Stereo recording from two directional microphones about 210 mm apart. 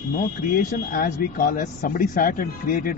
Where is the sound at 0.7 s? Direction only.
40° left (ahead or behind).